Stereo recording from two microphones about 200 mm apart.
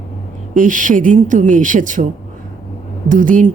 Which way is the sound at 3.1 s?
40° right (ahead or behind).